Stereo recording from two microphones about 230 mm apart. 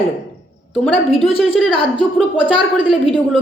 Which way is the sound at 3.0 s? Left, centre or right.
Centre.